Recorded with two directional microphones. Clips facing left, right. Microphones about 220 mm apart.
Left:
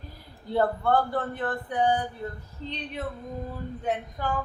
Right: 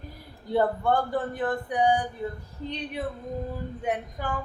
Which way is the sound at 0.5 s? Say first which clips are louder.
Even; 15° right (ahead or behind).